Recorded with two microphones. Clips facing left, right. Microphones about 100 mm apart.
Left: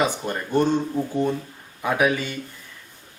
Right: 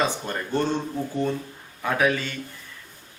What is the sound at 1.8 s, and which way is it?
Speech, 15° left (ahead or behind).